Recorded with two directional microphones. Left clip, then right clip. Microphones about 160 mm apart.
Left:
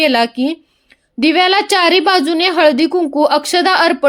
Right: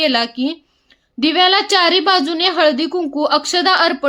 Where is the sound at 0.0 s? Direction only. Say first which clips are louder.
Left 3 dB; 35° left (ahead or behind).